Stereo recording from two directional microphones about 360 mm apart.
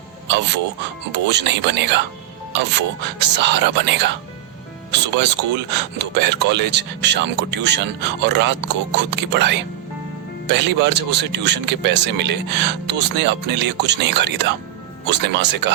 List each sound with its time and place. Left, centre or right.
0.3 s speech: right